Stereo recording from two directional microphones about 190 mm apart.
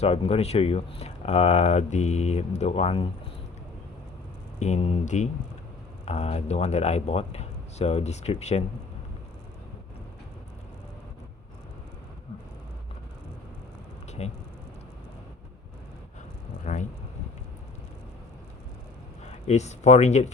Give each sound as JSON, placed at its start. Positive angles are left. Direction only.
{"t": 0.0, "sound": "speech", "side_deg": 30}
{"t": 4.6, "sound": "speech", "side_deg": 35}
{"t": 14.2, "sound": "speech", "side_deg": 35}
{"t": 19.2, "sound": "speech", "side_deg": 35}